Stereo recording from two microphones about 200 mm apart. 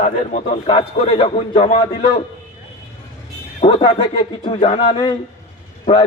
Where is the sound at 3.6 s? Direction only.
30° left (ahead or behind).